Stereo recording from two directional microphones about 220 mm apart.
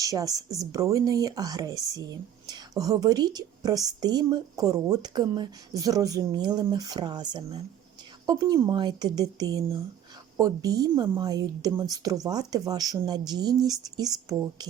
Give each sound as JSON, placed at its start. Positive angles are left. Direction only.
{"t": 0.0, "sound": "speech", "side_deg": -15}